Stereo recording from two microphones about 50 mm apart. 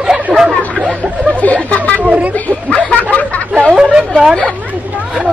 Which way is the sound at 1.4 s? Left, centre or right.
Left.